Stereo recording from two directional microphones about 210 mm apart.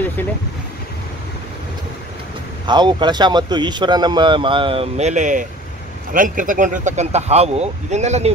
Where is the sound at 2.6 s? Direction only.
20° right (ahead or behind).